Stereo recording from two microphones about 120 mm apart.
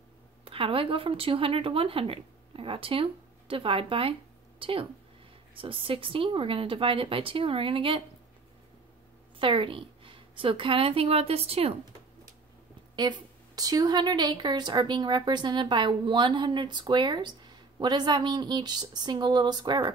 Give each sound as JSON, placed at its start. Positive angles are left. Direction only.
{"t": 0.5, "sound": "a woman's voice", "side_deg": -50}
{"t": 9.4, "sound": "a woman's voice", "side_deg": -45}
{"t": 12.9, "sound": "a woman's voice", "side_deg": -35}